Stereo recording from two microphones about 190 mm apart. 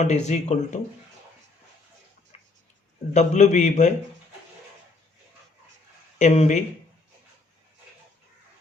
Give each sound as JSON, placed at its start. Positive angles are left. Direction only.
{"t": 0.0, "sound": "a man's voice", "side_deg": 35}
{"t": 2.3, "sound": "tick-tock", "side_deg": 35}
{"t": 3.1, "sound": "a man's voice", "side_deg": 40}
{"t": 6.1, "sound": "a man's voice", "side_deg": 35}